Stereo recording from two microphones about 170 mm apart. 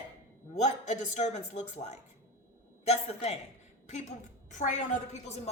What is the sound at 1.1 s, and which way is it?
A man's voice, 40° left (ahead or behind).